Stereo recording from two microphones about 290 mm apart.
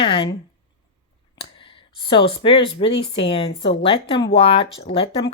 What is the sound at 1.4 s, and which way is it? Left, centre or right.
Speech, centre.